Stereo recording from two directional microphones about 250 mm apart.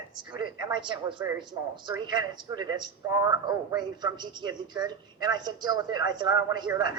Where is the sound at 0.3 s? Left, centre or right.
Centre.